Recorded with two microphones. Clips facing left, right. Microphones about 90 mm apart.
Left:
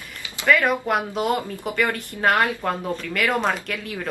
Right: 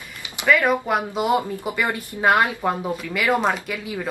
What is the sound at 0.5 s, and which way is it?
Speech, 5° right (ahead or behind).